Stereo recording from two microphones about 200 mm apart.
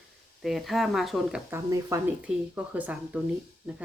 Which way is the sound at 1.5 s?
15° right (ahead or behind).